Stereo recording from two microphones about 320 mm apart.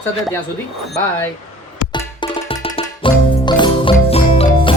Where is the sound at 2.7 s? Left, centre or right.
Centre.